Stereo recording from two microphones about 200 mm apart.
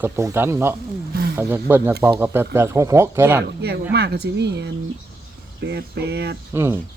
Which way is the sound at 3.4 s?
55° right (ahead or behind).